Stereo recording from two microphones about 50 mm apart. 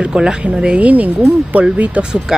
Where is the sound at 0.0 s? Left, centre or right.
Centre.